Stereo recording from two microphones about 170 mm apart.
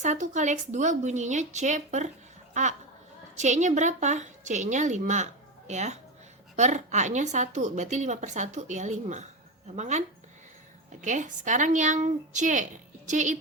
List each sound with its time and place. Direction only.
0.0 s a woman's voice: 45° right (ahead or behind)
3.3 s a woman's voice: 45° right (ahead or behind)
11.0 s a woman's voice: 45° right (ahead or behind)